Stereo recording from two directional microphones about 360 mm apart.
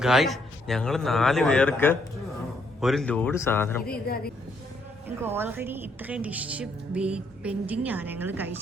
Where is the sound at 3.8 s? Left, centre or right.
Left.